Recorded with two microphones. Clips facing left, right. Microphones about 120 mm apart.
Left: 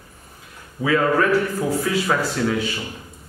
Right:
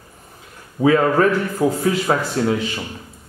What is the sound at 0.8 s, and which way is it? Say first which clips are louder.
A man's voice: right 4 dB; 30° right (ahead or behind).